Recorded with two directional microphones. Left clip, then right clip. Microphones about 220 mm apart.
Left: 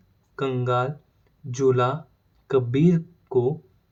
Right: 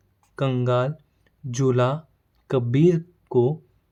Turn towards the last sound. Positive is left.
turn(degrees=-50)  # may be behind; listen again after turning